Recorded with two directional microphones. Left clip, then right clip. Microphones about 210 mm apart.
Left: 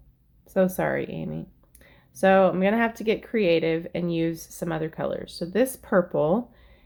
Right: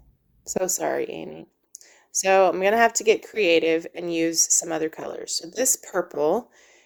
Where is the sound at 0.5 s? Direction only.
35° right (ahead or behind).